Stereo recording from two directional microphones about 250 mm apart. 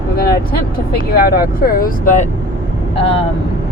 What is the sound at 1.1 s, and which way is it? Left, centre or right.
Speech, left.